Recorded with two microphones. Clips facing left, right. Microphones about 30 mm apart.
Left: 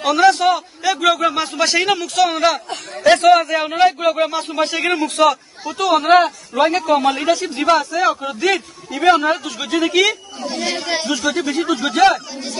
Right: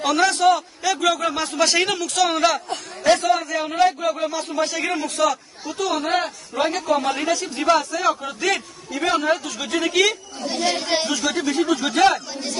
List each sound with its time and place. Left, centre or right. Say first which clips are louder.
0.0 s a man's voice: left 4 dB; centre
1.5 s a man's voice: left 3 dB; centre
3.1 s a man's voice: left 7 dB; left
3.4 s speech: left 4 dB; left
6.7 s a man's voice: left 5 dB; left; by 11.6 s centre
11.6 s a man's voice: left 3 dB; centre